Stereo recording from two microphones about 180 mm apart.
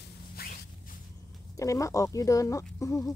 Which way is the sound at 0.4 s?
55° left (ahead or behind).